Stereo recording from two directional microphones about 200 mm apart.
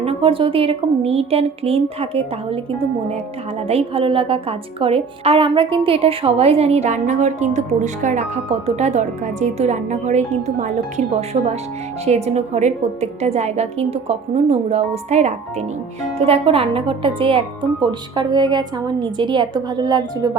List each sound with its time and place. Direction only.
0.0 s speech: 30° right (ahead or behind)
3.7 s a woman's voice: 30° right (ahead or behind)